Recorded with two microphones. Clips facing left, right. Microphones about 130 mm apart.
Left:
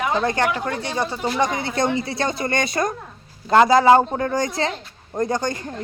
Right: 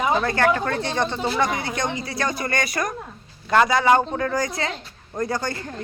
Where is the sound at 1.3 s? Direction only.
20° left (ahead or behind).